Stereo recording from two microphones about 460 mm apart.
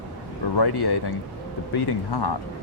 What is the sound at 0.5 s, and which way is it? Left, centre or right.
Speech, left.